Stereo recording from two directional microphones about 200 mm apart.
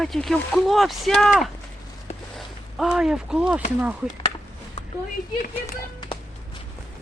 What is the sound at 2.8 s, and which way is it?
Speech, centre (ahead or behind).